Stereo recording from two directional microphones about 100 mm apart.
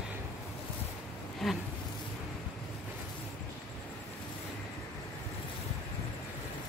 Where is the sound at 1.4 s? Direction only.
Centre (ahead or behind).